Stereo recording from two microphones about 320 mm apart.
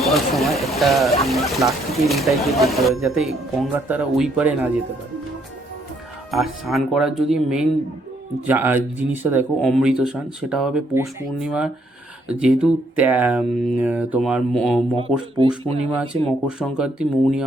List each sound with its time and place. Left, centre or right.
0.0 s speech: centre
6.3 s speech: centre
14.9 s speech: centre
16.5 s speech: centre